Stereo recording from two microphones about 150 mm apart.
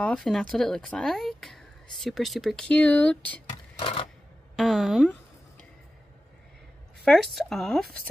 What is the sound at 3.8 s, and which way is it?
Typewriter, 35° left (ahead or behind).